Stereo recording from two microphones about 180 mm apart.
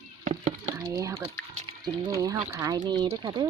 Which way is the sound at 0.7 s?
15° right (ahead or behind).